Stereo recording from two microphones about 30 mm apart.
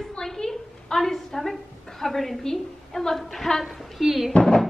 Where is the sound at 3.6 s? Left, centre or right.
Centre.